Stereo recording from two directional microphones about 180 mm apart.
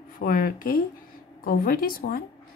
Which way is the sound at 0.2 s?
50° left (ahead or behind).